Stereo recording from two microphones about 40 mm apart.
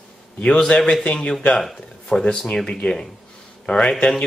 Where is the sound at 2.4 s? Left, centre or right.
Centre.